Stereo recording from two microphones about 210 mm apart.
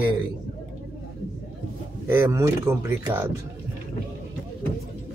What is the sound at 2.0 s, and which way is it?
Speech, 10° right (ahead or behind).